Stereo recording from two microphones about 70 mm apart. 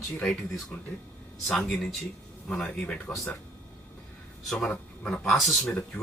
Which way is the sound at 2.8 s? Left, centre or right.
Left.